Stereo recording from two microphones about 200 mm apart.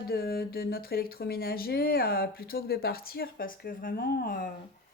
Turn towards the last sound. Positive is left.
turn(degrees=45)  # may be behind; listen again after turning